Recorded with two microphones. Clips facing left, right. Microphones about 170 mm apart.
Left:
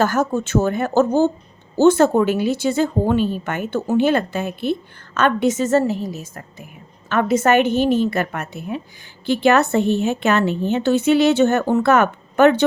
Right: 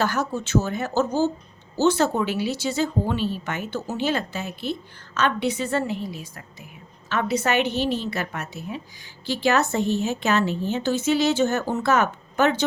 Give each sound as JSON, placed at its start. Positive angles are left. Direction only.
{"t": 0.0, "sound": "a woman's voice", "side_deg": 50}